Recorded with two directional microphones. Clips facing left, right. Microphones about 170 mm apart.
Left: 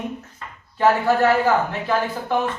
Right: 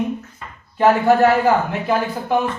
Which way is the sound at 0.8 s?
15° right (ahead or behind).